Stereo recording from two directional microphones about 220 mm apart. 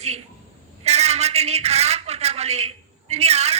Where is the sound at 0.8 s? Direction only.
30° right (ahead or behind).